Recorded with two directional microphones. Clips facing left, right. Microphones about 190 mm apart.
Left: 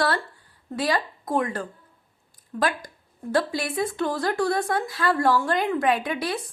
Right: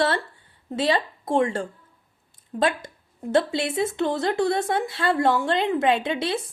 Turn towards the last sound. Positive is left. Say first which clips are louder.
# right 2 dB
turn(degrees=-25)  # may be behind; listen again after turning